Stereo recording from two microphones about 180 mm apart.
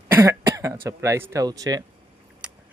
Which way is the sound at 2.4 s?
5° right (ahead or behind).